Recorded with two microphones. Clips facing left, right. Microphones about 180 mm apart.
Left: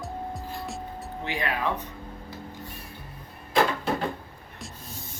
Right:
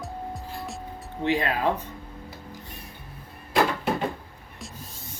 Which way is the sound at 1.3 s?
30° right (ahead or behind).